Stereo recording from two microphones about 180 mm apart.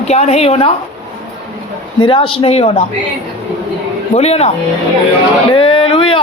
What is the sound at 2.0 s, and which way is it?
Speech, 30° left (ahead or behind).